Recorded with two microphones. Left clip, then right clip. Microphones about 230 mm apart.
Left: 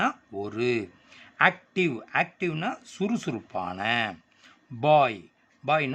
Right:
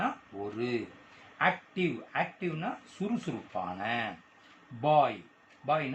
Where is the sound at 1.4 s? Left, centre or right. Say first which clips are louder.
Left 6 dB; left.